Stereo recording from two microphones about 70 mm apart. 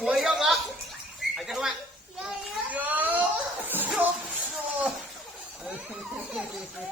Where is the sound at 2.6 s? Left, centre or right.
Right.